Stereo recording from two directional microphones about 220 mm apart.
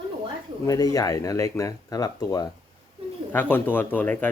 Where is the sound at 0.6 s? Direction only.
15° left (ahead or behind).